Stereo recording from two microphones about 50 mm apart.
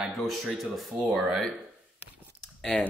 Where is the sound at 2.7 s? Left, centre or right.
Centre.